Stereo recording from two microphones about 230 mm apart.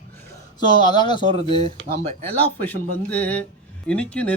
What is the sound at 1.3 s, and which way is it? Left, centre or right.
Speech, right.